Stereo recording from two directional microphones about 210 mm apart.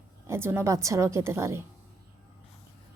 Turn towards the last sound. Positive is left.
turn(degrees=-10)  # may be behind; listen again after turning